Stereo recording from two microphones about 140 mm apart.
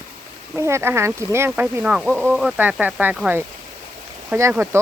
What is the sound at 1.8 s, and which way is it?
Speech, 5° right (ahead or behind).